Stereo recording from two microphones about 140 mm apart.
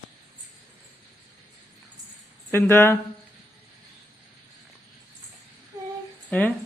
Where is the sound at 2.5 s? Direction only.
15° left (ahead or behind).